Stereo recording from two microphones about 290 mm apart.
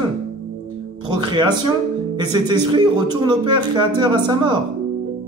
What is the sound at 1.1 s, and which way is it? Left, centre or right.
Speech, centre.